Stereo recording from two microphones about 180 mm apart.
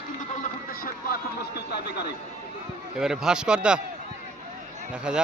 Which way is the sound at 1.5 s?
65° left (ahead or behind).